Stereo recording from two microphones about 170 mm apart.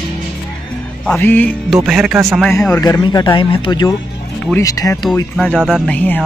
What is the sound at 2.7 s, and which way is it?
Speech, 20° left (ahead or behind).